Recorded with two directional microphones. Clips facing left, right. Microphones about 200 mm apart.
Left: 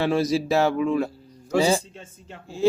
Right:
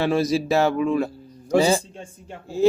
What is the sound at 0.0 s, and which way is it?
Speech, 45° right (ahead or behind).